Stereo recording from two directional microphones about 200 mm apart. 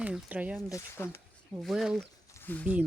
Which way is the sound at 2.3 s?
10° left (ahead or behind).